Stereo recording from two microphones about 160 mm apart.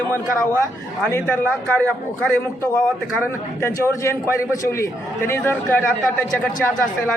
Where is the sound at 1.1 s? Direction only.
10° left (ahead or behind).